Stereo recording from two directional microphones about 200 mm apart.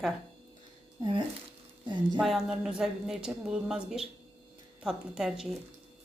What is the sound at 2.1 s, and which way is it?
A woman's voice, centre (ahead or behind).